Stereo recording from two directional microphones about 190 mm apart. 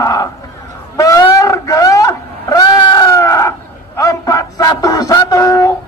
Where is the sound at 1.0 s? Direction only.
15° left (ahead or behind).